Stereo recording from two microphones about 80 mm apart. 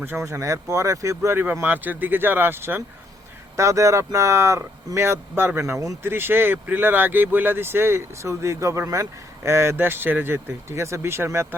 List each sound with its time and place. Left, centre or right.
0.0 s speech: right
1.6 s speech: right
3.5 s speech: right